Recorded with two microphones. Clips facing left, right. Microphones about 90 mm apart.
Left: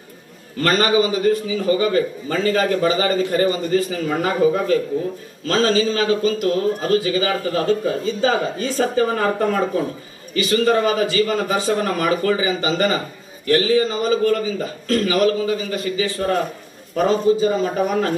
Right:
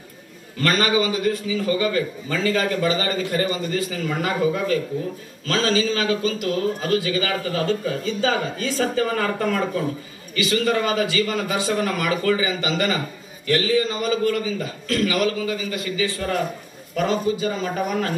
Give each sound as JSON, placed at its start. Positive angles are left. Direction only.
{"t": 0.6, "sound": "a man's voice", "side_deg": 40}